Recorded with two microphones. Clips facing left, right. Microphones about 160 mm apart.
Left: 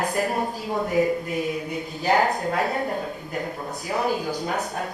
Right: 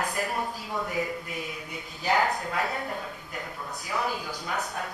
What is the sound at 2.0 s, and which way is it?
A woman's voice, 40° left (ahead or behind).